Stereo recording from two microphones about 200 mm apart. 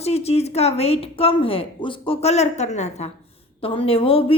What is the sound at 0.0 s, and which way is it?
A woman's voice, 30° left (ahead or behind).